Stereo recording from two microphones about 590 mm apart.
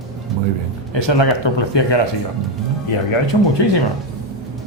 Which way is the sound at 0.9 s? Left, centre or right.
Left.